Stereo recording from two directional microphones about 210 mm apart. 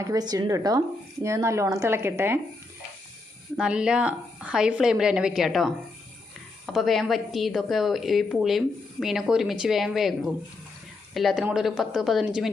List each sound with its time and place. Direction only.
0.0 s speech: 15° right (ahead or behind)
3.6 s a woman's voice: 5° right (ahead or behind)
6.7 s a woman's voice: centre (ahead or behind)